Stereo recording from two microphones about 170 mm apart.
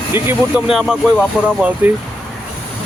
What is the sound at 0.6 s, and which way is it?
Speech, centre (ahead or behind).